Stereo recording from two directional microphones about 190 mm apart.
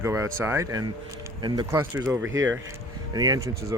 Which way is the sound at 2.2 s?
90° right.